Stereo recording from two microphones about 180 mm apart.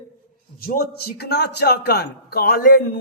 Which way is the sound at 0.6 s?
55° left (ahead or behind).